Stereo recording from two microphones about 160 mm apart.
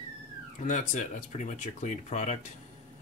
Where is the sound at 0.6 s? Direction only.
50° left (ahead or behind).